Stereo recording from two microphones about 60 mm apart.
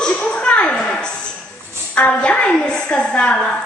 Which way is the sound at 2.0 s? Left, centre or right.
Centre.